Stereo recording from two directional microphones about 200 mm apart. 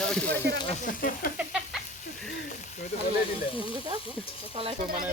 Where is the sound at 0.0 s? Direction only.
5° left (ahead or behind).